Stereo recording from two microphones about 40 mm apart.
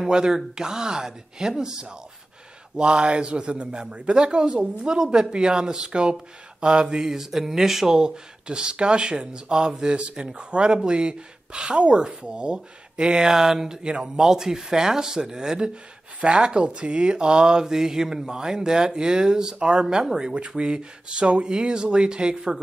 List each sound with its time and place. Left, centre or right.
0.0 s speech: centre
13.3 s speech: centre
13.8 s speech: right